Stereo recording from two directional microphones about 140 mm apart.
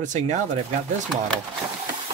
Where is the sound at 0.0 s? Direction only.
60° right (ahead or behind).